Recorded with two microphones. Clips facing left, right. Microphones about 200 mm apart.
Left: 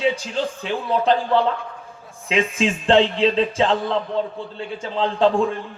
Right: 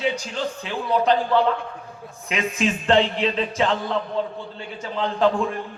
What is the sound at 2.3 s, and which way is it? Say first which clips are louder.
A man's voice: left 3 dB; 30° left (ahead or behind).